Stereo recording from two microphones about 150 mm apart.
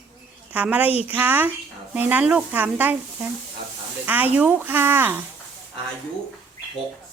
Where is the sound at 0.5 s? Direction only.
10° right (ahead or behind).